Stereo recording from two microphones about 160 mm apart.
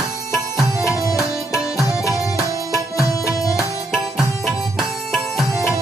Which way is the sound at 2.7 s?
20° left (ahead or behind).